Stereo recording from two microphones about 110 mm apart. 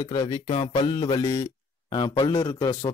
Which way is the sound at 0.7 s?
45° left (ahead or behind).